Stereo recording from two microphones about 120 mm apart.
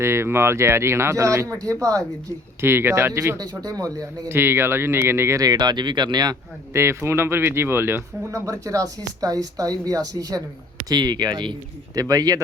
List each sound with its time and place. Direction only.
0.0 s speech: 20° right (ahead or behind); by 6.3 s 35° right (ahead or behind)
6.7 s speech: 20° right (ahead or behind)